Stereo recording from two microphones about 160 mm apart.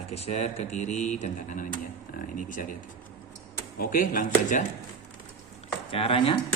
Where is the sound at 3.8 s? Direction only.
65° left (ahead or behind).